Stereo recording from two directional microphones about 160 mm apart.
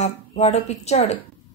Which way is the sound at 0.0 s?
45° left (ahead or behind).